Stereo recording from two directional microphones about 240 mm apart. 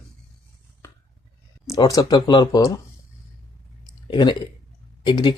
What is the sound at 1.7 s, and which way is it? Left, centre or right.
Speech, centre.